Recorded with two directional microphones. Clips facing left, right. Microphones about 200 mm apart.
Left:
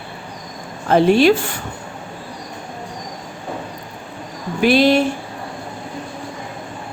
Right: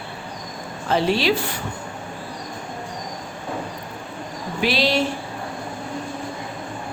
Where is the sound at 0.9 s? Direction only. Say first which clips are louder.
Left 8 dB; 50° left (ahead or behind).